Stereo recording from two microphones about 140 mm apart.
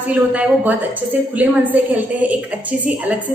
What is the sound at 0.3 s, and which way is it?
A woman's voice, 10° right (ahead or behind).